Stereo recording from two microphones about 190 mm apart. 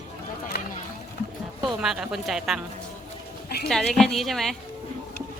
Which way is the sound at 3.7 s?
5° left (ahead or behind).